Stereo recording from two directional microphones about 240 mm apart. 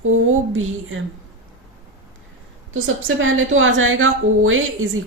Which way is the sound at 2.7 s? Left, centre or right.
Right.